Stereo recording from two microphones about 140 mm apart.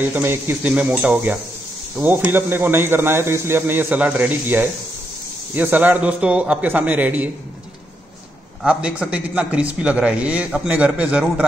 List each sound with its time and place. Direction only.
0.0 s a man's voice: 15° right (ahead or behind)
8.6 s a man's voice: 10° right (ahead or behind)